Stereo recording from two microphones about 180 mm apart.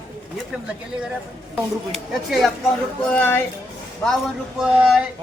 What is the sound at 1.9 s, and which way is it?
Speech, centre (ahead or behind).